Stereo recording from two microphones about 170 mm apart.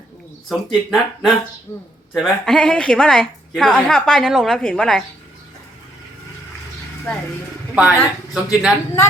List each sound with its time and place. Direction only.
0.4 s a woman's voice: centre (ahead or behind)
1.7 s speech: 20° left (ahead or behind)
2.1 s a woman's voice: 5° left (ahead or behind)
7.1 s speech: 5° left (ahead or behind)
7.8 s a woman's voice: 5° right (ahead or behind)